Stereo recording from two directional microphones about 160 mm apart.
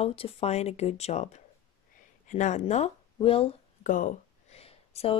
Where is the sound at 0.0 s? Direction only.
35° left (ahead or behind).